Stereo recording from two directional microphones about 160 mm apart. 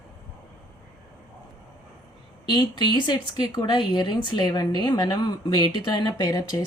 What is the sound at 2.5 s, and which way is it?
Speech, 30° left (ahead or behind).